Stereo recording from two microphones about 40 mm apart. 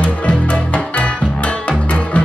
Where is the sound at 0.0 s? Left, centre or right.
Left.